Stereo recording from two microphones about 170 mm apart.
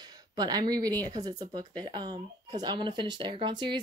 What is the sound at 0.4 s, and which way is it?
Speech, 25° right (ahead or behind).